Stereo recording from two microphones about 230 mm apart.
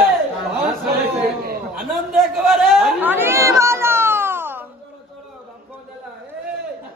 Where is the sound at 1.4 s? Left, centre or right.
Right.